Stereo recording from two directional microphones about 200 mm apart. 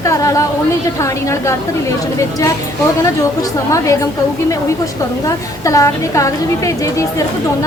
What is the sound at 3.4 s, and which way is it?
Speech, 15° left (ahead or behind).